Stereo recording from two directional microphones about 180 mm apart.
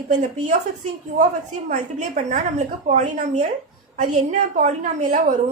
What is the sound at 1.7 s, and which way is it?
A woman's voice, 45° right (ahead or behind).